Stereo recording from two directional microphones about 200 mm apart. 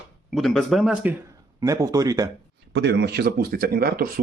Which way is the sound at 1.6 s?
15° right (ahead or behind).